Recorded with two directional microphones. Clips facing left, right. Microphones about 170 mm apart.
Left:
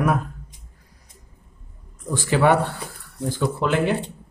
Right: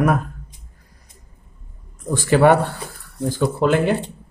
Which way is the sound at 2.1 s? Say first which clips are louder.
Right 4 dB; 45° right (ahead or behind).